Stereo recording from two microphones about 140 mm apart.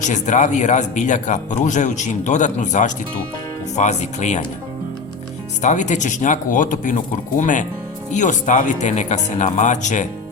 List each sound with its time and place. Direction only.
0.0 s speech: 60° left (ahead or behind)
5.6 s speech: 60° left (ahead or behind)